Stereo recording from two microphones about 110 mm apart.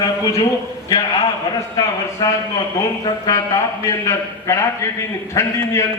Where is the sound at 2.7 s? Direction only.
30° left (ahead or behind).